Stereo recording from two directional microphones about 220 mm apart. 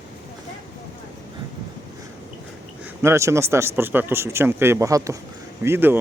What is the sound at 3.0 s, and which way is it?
A man's voice, 10° right (ahead or behind).